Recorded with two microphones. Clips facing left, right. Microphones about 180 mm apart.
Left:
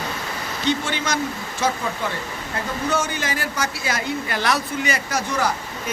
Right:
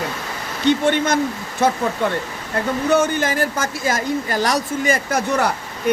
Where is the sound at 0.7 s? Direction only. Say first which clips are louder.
Right 7 dB; 55° right (ahead or behind).